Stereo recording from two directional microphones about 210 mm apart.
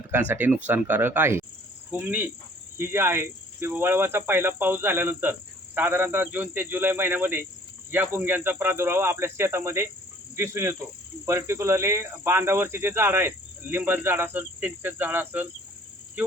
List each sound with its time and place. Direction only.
0.1 s speech: 10° right (ahead or behind)